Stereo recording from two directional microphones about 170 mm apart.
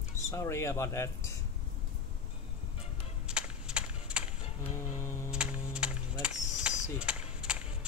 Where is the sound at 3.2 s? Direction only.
5° right (ahead or behind).